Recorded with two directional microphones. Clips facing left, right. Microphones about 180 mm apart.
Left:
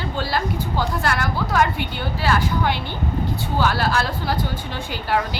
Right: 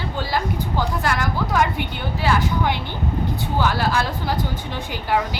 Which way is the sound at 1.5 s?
20° right (ahead or behind).